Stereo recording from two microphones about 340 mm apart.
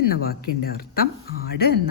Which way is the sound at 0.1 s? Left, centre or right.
Left.